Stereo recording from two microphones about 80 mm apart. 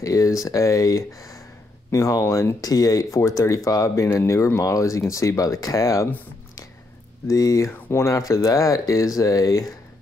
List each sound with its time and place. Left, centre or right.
0.0 s speech: left
7.2 s speech: left